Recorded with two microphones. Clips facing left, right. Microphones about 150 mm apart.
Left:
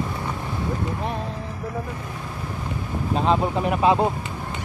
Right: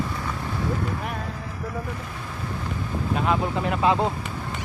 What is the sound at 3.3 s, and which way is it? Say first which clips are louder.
Speech: left 4 dB; 20° left (ahead or behind).